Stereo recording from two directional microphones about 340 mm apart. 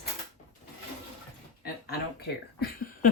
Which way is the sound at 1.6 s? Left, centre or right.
Left.